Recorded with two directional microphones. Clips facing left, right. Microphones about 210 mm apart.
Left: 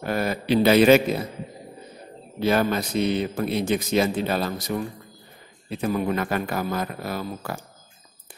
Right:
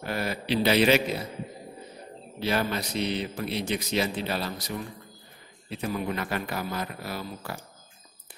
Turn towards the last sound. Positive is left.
turn(degrees=50)  # may be behind; listen again after turning